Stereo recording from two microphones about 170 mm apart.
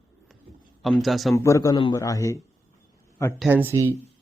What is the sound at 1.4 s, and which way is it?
A man's voice, 20° left (ahead or behind).